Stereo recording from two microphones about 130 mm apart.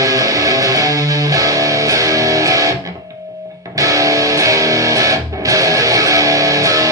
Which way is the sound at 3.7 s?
25° right (ahead or behind).